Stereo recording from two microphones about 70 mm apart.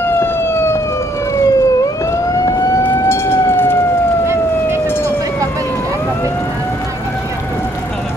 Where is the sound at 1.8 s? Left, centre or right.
Left.